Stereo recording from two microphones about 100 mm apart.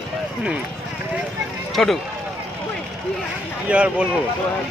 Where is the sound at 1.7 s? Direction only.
Centre (ahead or behind).